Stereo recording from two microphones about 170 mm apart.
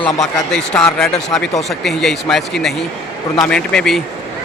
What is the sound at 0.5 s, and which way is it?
Speech, 5° left (ahead or behind).